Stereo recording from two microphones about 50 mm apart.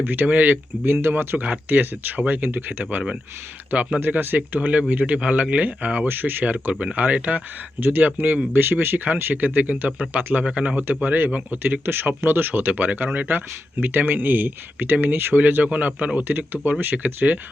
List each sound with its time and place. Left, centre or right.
0.0 s speech: right
0.9 s speech: right
6.1 s speech: right
7.8 s speech: right
10.4 s speech: right
10.8 s speech: right
12.7 s speech: right